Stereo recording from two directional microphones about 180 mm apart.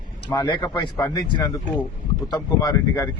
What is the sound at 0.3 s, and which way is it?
A man's voice, 25° left (ahead or behind).